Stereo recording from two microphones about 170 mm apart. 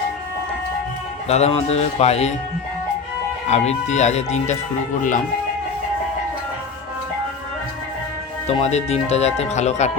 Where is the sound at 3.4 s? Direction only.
40° left (ahead or behind).